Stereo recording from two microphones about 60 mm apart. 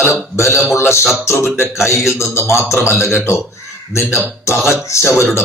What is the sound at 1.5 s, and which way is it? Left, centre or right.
Music, left.